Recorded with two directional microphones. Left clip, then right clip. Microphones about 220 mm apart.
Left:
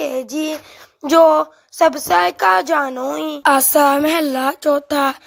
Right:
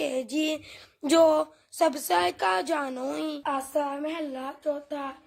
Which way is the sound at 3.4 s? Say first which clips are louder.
Left 18 dB; 55° left (ahead or behind).